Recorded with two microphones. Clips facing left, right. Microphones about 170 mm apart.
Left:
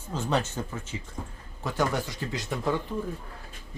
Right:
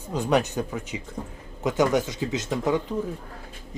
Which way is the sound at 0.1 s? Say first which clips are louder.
Right 5 dB; 15° right (ahead or behind).